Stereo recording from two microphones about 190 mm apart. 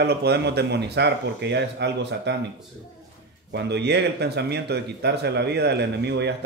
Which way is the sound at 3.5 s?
65° right (ahead or behind).